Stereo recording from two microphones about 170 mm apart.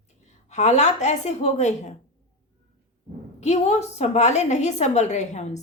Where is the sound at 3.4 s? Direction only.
40° left (ahead or behind).